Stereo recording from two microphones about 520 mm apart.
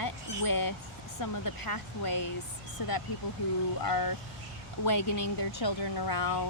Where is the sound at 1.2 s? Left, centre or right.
Left.